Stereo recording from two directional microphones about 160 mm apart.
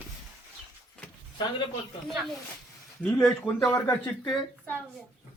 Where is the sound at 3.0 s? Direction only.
10° left (ahead or behind).